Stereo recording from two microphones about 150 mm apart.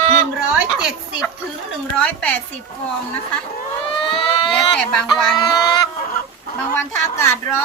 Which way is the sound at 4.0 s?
35° left (ahead or behind).